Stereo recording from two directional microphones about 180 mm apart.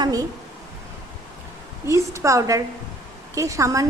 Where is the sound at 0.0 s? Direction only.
20° right (ahead or behind).